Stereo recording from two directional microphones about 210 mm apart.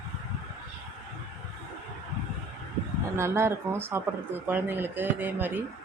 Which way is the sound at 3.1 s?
10° right (ahead or behind).